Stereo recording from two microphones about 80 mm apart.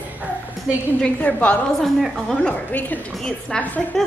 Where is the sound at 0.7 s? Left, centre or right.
Centre.